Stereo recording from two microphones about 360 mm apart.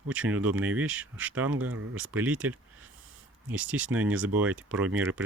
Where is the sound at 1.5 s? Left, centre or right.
Right.